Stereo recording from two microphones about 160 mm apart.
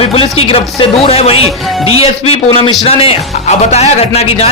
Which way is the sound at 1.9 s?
35° left (ahead or behind).